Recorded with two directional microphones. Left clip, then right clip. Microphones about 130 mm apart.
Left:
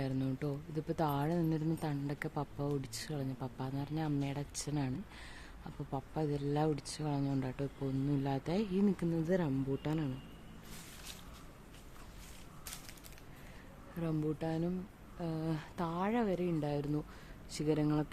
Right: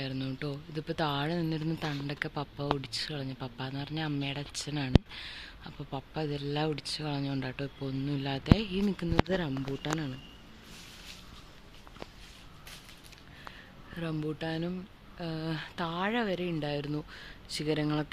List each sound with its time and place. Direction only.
0.0 s a man's voice: 30° left (ahead or behind)
0.3 s speech: 15° left (ahead or behind)
14.0 s speech: 15° left (ahead or behind)